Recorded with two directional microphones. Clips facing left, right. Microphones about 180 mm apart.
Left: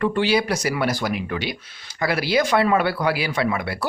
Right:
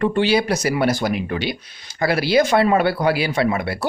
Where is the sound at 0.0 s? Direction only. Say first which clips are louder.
Right 2 dB; 25° right (ahead or behind).